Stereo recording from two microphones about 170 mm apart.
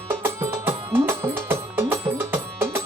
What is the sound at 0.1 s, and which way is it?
Music, 15° right (ahead or behind).